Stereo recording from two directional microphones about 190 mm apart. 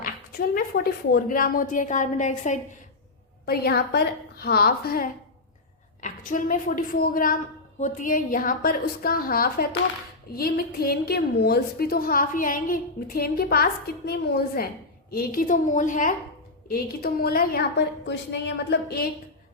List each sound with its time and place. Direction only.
0.0 s a woman's voice: 50° left (ahead or behind)
3.4 s a woman's voice: 55° left (ahead or behind)